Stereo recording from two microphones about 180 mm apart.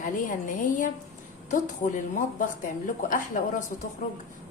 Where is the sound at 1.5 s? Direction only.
45° left (ahead or behind).